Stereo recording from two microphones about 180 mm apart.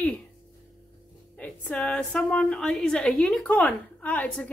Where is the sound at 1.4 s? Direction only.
10° left (ahead or behind).